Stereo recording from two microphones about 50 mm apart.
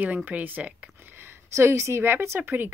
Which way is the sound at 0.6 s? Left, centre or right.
Right.